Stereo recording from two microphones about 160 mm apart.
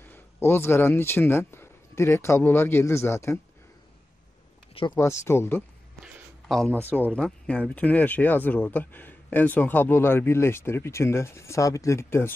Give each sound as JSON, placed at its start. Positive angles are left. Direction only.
{"t": 0.0, "sound": "speech", "side_deg": 15}
{"t": 4.9, "sound": "speech", "side_deg": 15}